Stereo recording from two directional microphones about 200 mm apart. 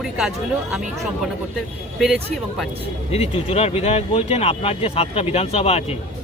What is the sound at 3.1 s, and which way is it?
Speech, 30° left (ahead or behind).